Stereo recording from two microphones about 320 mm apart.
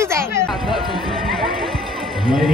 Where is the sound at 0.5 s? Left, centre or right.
Centre.